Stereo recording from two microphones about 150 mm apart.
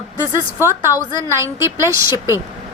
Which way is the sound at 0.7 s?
20° right (ahead or behind).